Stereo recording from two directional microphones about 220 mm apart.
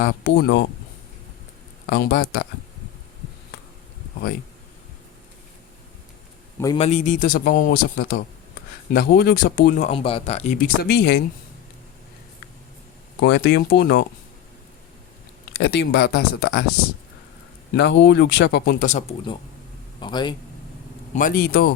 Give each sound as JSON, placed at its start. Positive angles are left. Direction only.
{"t": 0.0, "sound": "speech", "side_deg": 45}
{"t": 1.9, "sound": "speech", "side_deg": 50}
{"t": 6.7, "sound": "speech", "side_deg": 30}
{"t": 7.9, "sound": "speech", "side_deg": 55}
{"t": 8.9, "sound": "speech", "side_deg": 45}
{"t": 9.9, "sound": "speech", "side_deg": 25}
{"t": 13.1, "sound": "speech", "side_deg": 50}
{"t": 15.5, "sound": "speech", "side_deg": 50}
{"t": 17.7, "sound": "speech", "side_deg": 50}
{"t": 20.0, "sound": "a man's voice", "side_deg": 20}
{"t": 21.2, "sound": "speech", "side_deg": 40}